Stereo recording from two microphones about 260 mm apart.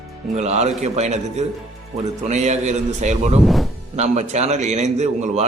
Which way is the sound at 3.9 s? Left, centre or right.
Right.